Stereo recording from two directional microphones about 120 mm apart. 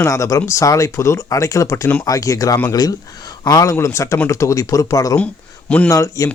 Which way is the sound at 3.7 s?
20° left (ahead or behind).